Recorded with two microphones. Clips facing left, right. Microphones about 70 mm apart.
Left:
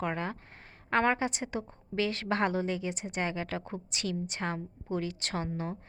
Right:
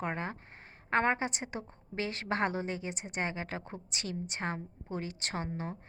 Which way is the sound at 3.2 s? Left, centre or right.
Right.